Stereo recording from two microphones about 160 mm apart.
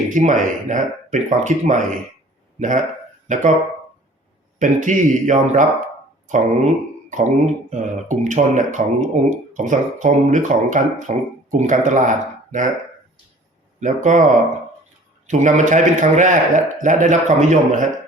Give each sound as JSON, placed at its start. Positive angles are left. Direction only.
{"t": 0.1, "sound": "speech", "side_deg": -50}
{"t": 4.6, "sound": "speech", "side_deg": -50}
{"t": 13.7, "sound": "speech", "side_deg": -50}
{"t": 15.3, "sound": "speech", "side_deg": -50}